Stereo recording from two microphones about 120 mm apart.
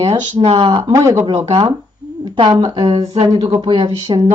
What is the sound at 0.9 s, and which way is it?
Speech, 25° right (ahead or behind).